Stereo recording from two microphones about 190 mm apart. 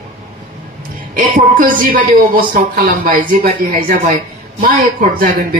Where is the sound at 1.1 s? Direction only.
45° right (ahead or behind).